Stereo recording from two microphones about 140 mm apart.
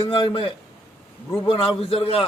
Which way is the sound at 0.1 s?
40° left (ahead or behind).